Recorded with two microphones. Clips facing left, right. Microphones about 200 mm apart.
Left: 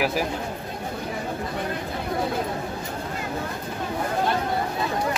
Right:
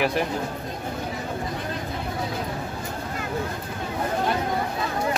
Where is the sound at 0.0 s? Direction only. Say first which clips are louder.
Right 1 dB; 5° left (ahead or behind).